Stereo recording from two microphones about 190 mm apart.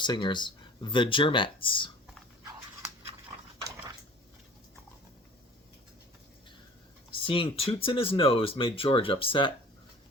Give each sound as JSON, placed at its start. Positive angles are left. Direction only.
{"t": 0.0, "sound": "speech", "side_deg": 25}
{"t": 7.1, "sound": "speech", "side_deg": 30}